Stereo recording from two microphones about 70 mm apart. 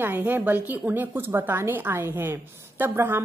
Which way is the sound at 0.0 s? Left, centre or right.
Right.